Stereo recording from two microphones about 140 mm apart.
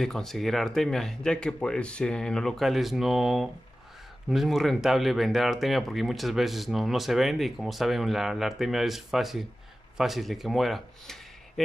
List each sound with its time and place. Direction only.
0.0 s speech: centre (ahead or behind)